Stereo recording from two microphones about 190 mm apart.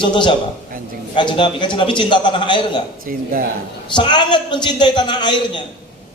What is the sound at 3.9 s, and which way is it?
A man's voice, 25° left (ahead or behind).